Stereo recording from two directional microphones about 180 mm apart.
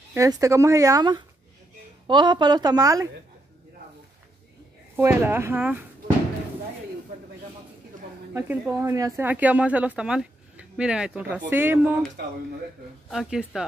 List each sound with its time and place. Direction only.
0.1 s a woman's voice: 15° right (ahead or behind)
4.9 s speech: 10° right (ahead or behind)
8.3 s speech: 10° right (ahead or behind)
13.1 s speech: centre (ahead or behind)